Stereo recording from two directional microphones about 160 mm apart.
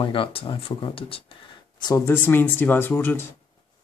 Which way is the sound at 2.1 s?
10° left (ahead or behind).